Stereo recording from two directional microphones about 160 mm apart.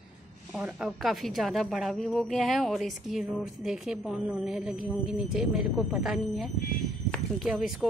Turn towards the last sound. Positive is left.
turn(degrees=0)  # may be behind; listen again after turning